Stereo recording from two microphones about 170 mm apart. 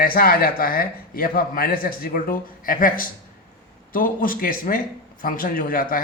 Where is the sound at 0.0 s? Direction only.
60° left (ahead or behind).